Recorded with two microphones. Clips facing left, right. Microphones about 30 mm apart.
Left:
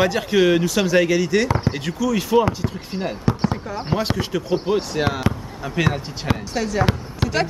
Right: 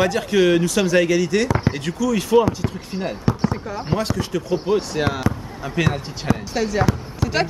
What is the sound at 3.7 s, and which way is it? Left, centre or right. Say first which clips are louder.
Speech: even; centre.